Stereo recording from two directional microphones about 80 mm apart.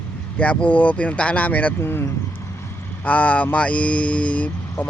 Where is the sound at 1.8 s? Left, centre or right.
Left.